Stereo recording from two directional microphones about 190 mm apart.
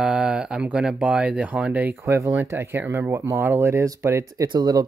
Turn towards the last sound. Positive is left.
turn(degrees=-20)  # may be behind; listen again after turning